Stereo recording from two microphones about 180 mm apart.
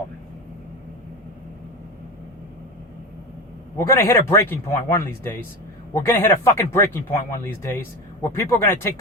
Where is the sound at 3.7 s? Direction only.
15° left (ahead or behind).